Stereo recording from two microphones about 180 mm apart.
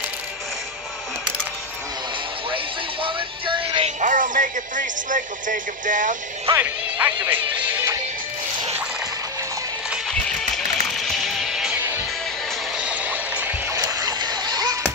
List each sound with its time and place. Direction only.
2.5 s music: 30° right (ahead or behind)
4.0 s speech: 45° right (ahead or behind)
6.5 s speech: 10° right (ahead or behind)
10.5 s music: centre (ahead or behind)
12.7 s vehicle: 10° right (ahead or behind)
13.7 s music: 20° right (ahead or behind)